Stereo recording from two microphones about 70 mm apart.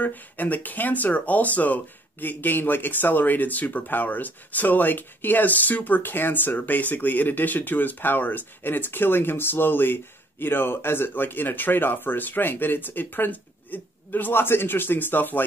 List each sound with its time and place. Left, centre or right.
0.0 s speech: left